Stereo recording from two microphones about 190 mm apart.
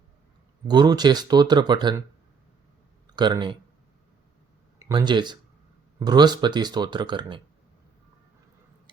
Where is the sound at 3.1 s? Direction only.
20° right (ahead or behind).